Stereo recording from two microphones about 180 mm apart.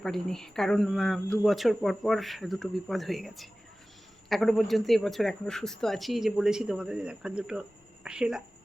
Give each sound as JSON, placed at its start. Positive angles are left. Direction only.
{"t": 0.0, "sound": "speech", "side_deg": 5}